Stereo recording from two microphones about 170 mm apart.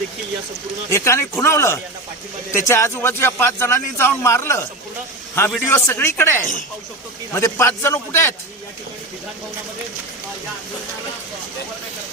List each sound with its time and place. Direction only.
0.9 s a man's voice: 15° left (ahead or behind)